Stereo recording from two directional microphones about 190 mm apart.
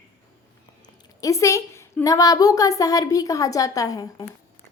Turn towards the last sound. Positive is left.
turn(degrees=20)  # may be behind; listen again after turning